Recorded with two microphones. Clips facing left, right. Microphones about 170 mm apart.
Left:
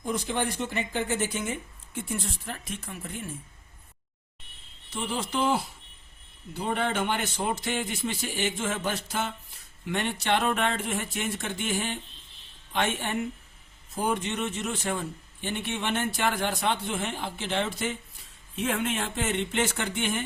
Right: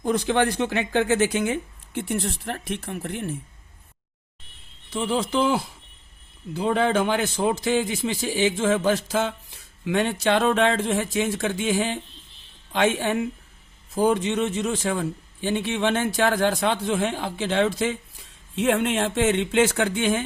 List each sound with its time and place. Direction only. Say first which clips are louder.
0.0 s speech: right 8 dB; 85° right; by 3.3 s 65° right (ahead or behind)
4.9 s a man's voice: right 7 dB; 90° right
18.5 s a man's voice: right 7 dB; 75° right (ahead or behind); by 20.2 s 90° right